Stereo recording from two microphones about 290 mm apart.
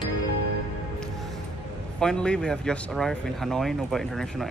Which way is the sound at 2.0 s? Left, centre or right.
Centre.